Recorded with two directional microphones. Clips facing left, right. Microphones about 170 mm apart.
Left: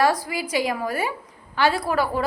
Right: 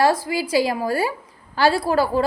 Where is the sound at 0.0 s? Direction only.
25° right (ahead or behind).